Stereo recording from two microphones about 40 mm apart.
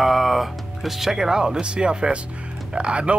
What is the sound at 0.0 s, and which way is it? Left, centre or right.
Speech, centre.